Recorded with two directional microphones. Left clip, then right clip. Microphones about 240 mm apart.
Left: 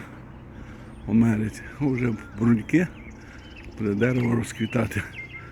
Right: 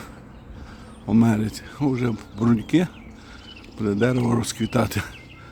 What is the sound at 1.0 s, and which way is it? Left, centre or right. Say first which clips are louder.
Speech: right 3 dB; centre.